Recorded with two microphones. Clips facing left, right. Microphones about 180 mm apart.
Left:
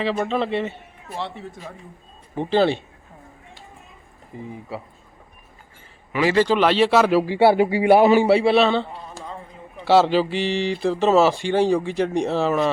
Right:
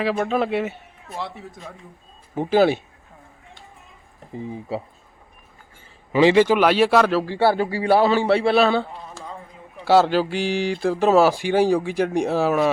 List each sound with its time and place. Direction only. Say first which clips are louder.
0.0 s speech: right 1 dB; 5° right (ahead or behind)
2.3 s speech: right 2 dB; 10° right (ahead or behind)
4.3 s speech: right 4 dB; 25° right (ahead or behind)
6.3 s a man's voice: right 2 dB; 10° right (ahead or behind); by 8.4 s 15° left (ahead or behind)
8.4 s speech: left 1 dB; centre (ahead or behind)